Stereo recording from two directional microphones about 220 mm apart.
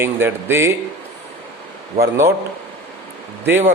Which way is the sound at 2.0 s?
25° right (ahead or behind).